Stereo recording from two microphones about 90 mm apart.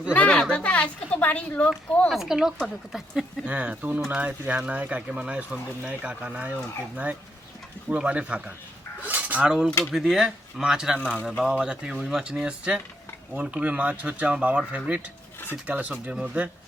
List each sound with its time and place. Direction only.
0.1 s a woman's voice: 15° left (ahead or behind)
2.0 s speech: 5° right (ahead or behind)
3.5 s speech: 15° right (ahead or behind)
9.0 s cutlery: 20° right (ahead or behind)
9.9 s speech: 5° right (ahead or behind)